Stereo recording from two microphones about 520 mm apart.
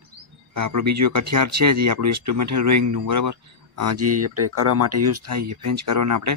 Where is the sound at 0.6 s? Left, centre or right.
Right.